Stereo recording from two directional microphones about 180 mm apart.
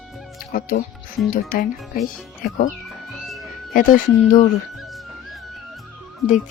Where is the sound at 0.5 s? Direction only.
55° left (ahead or behind).